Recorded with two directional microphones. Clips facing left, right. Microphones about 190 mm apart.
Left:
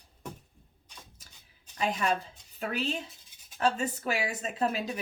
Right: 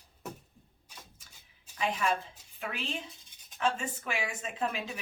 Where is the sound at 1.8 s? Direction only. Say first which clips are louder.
Left 2 dB; 35° left (ahead or behind).